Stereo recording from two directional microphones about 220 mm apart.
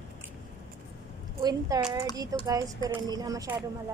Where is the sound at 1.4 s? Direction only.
15° right (ahead or behind).